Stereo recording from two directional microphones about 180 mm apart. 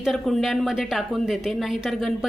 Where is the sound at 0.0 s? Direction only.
Centre (ahead or behind).